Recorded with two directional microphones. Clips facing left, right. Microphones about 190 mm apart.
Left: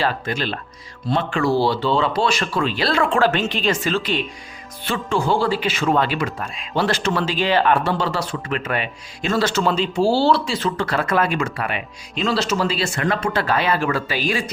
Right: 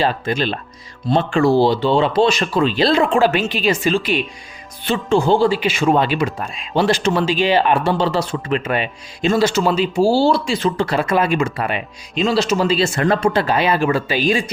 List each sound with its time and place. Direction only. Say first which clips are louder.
0.0 s a man's voice: right 4 dB; 20° right (ahead or behind)
4.9 s a man's voice: right 5 dB; 25° right (ahead or behind)
9.4 s speech: right 1 dB; 10° right (ahead or behind)